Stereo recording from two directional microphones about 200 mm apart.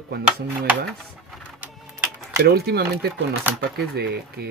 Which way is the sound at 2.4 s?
50° right (ahead or behind).